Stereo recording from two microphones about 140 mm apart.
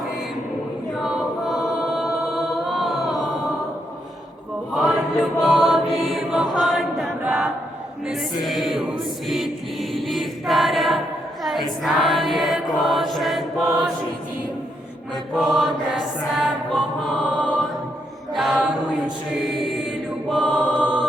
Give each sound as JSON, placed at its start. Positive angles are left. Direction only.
{"t": 1.0, "sound": "a capella", "side_deg": 0}
{"t": 4.7, "sound": "chant", "side_deg": 0}
{"t": 6.1, "sound": "choir", "side_deg": 0}
{"t": 8.4, "sound": "music", "side_deg": 0}
{"t": 9.9, "sound": "choir", "side_deg": 0}
{"t": 11.8, "sound": "mantra", "side_deg": 0}
{"t": 15.1, "sound": "music", "side_deg": 0}
{"t": 18.3, "sound": "chant", "side_deg": 0}
{"t": 20.3, "sound": "chant", "side_deg": 0}